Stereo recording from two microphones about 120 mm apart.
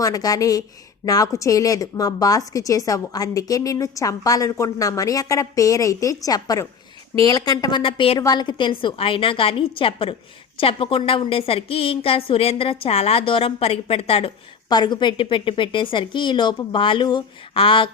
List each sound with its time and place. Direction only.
0.0 s a woman's voice: 30° left (ahead or behind); by 8.2 s 50° left (ahead or behind)
8.2 s a woman's voice: 35° left (ahead or behind); by 14.3 s 50° left (ahead or behind)
14.7 s a woman's voice: 40° left (ahead or behind)